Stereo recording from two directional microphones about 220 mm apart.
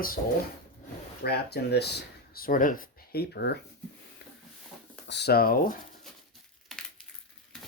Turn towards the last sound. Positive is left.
turn(degrees=40)  # may be behind; listen again after turning